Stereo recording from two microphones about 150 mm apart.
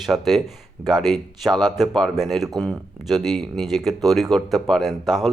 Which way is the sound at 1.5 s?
30° right (ahead or behind).